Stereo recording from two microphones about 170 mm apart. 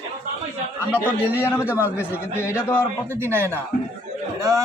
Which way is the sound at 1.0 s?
10° right (ahead or behind).